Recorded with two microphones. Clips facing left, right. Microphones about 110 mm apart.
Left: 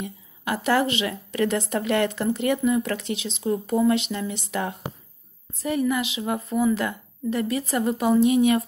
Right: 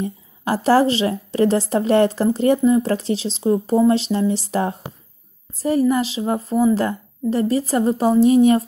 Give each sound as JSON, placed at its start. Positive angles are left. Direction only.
{"t": 0.0, "sound": "a woman's voice", "side_deg": -35}